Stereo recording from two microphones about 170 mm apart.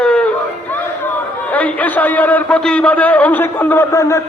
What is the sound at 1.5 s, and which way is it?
A man's voice, 10° left (ahead or behind).